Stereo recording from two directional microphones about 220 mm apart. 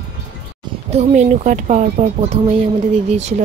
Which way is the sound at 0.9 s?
30° right (ahead or behind).